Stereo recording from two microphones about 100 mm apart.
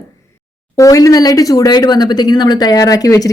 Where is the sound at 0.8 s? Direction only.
35° left (ahead or behind).